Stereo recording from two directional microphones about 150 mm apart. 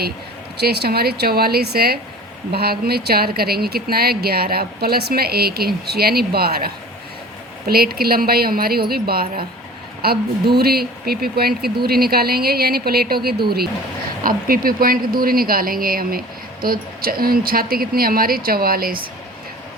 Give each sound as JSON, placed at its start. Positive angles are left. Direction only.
{"t": 0.5, "sound": "a woman's voice", "side_deg": -90}
{"t": 14.3, "sound": "speech", "side_deg": -75}